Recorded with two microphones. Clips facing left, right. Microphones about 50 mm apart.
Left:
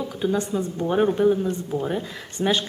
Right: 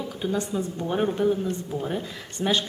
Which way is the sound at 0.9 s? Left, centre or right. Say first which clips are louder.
Left 5 dB; centre.